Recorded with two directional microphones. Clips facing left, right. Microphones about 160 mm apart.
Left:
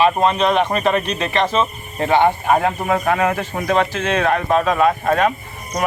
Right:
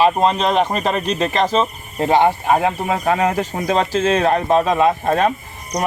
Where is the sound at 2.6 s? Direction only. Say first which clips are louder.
Left 1 dB; 15° right (ahead or behind).